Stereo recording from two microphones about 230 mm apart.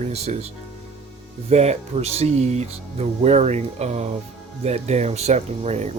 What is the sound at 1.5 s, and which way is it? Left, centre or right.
Speech, right.